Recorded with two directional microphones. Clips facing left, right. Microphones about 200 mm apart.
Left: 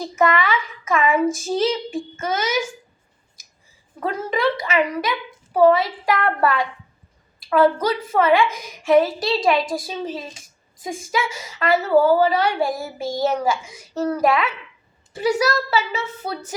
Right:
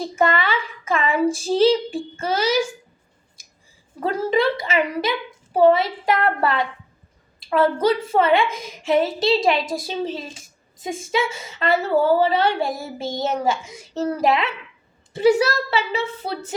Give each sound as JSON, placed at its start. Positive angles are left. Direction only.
{"t": 0.0, "sound": "a woman's voice", "side_deg": -30}
{"t": 4.0, "sound": "a woman's voice", "side_deg": -30}